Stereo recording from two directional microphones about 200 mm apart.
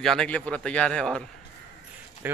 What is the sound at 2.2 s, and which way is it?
Speech, 10° right (ahead or behind).